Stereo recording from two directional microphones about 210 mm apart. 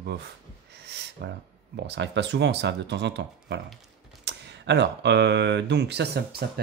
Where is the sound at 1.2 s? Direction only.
55° right (ahead or behind).